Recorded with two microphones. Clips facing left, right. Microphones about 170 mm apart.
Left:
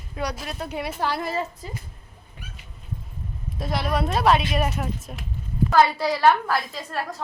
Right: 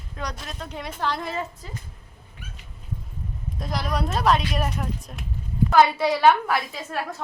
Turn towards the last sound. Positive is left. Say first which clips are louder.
# even
turn(degrees=0)  # may be behind; listen again after turning